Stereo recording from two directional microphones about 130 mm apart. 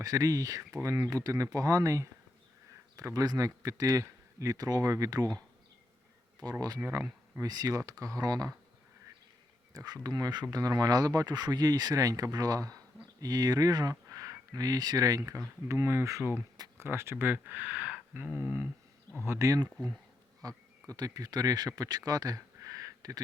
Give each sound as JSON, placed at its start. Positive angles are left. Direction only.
{"t": 0.0, "sound": "speech", "side_deg": -30}
{"t": 6.4, "sound": "speech", "side_deg": -30}
{"t": 9.7, "sound": "speech", "side_deg": -30}